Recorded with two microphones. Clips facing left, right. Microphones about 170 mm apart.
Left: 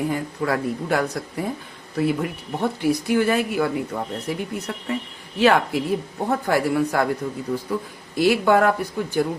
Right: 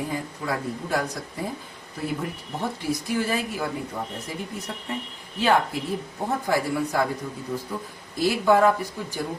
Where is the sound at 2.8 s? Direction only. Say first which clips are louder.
Left 7 dB; 65° left (ahead or behind).